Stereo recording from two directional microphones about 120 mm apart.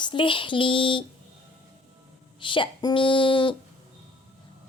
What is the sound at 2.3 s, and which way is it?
Music, 45° left (ahead or behind).